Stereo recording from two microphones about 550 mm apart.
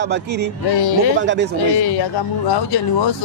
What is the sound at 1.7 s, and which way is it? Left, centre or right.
Speech, left.